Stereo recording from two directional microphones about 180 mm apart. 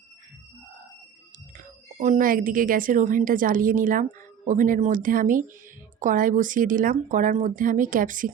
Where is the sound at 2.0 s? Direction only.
45° right (ahead or behind).